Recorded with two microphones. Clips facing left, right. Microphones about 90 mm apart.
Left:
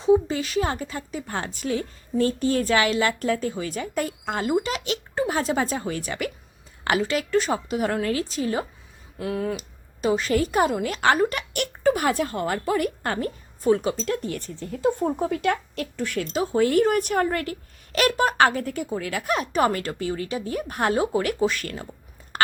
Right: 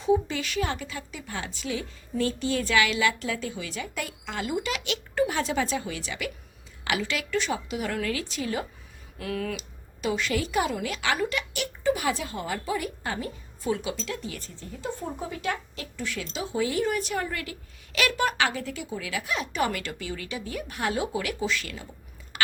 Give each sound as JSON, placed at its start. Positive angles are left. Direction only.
{"t": 0.0, "sound": "a woman's voice", "side_deg": 35}
{"t": 9.6, "sound": "a woman's voice", "side_deg": 40}
{"t": 22.3, "sound": "a sound", "side_deg": 45}